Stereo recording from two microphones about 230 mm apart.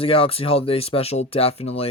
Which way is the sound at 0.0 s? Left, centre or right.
Left.